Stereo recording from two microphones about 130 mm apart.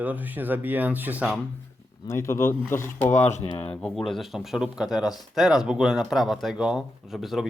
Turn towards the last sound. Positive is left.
turn(degrees=0)  # may be behind; listen again after turning